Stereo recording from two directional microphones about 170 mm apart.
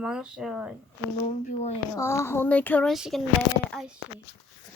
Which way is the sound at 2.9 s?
5° right (ahead or behind).